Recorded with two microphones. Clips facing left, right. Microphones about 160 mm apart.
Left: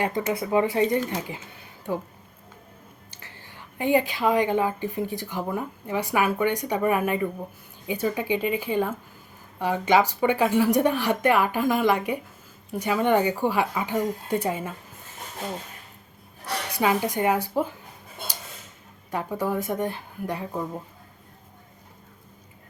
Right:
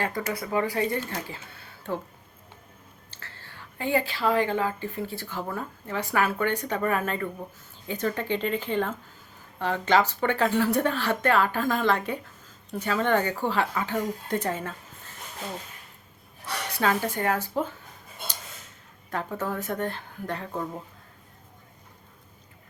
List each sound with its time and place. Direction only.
0.0 s a woman's voice: 20° left (ahead or behind)
3.1 s a woman's voice: 15° left (ahead or behind)
16.7 s a woman's voice: 15° left (ahead or behind)
19.1 s a woman's voice: 10° left (ahead or behind)